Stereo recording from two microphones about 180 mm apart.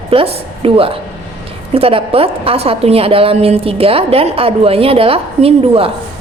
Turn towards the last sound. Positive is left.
turn(degrees=-30)  # may be behind; listen again after turning